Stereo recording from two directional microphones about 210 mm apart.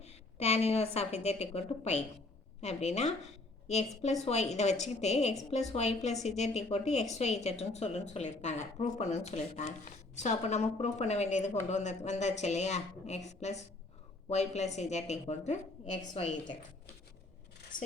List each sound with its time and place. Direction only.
0.0 s a woman's voice: 30° left (ahead or behind)